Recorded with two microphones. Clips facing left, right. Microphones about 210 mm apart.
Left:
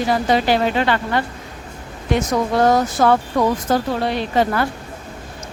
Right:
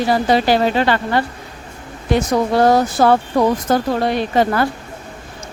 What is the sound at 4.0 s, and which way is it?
Speech, 50° right (ahead or behind).